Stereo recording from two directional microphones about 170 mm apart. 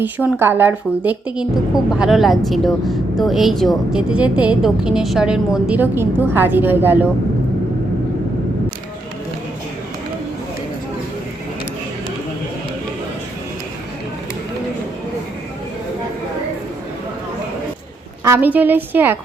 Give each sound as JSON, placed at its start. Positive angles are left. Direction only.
{"t": 0.0, "sound": "speech", "side_deg": -10}
{"t": 18.3, "sound": "a woman's voice", "side_deg": -10}